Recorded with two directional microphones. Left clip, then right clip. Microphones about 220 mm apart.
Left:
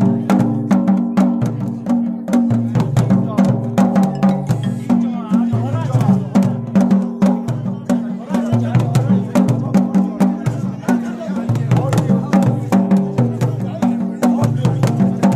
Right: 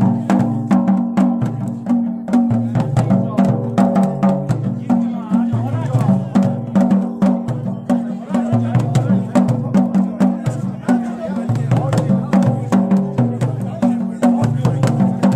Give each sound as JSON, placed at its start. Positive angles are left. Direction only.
{"t": 0.0, "sound": "music", "side_deg": 30}
{"t": 6.3, "sound": "music", "side_deg": 25}
{"t": 11.7, "sound": "music", "side_deg": 25}